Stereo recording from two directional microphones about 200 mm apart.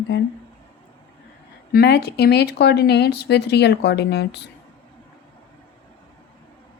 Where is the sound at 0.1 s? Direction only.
65° left (ahead or behind).